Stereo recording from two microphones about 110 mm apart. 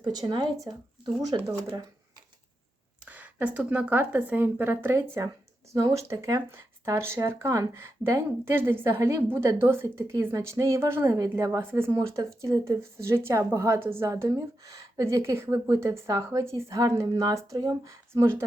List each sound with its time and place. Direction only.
0.0 s speech: 40° right (ahead or behind)
3.1 s speech: 15° right (ahead or behind)
4.9 s speech: 30° right (ahead or behind)
17.8 s speech: 25° right (ahead or behind)